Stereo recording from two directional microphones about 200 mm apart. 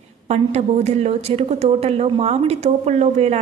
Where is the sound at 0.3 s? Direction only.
35° right (ahead or behind).